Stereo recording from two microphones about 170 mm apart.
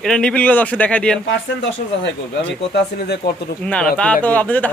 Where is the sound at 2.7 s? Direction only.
75° left (ahead or behind).